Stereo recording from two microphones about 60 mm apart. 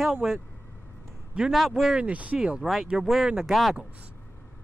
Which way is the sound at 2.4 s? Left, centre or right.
Centre.